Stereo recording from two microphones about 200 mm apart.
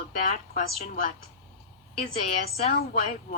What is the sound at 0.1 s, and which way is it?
A woman's voice, 40° left (ahead or behind).